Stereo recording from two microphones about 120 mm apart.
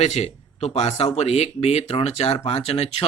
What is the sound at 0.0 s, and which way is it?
Speech, 65° left (ahead or behind).